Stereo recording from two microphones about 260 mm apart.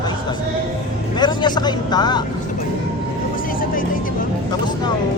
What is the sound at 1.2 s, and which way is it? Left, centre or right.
Speech, centre.